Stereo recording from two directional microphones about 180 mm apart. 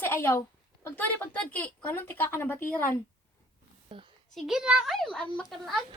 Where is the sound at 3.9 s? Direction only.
30° right (ahead or behind).